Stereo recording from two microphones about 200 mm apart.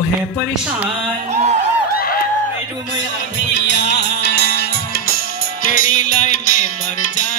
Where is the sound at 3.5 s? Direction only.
60° left (ahead or behind).